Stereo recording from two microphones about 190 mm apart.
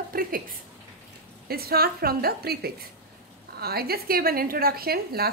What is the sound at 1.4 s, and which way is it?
A woman's voice, 55° right (ahead or behind).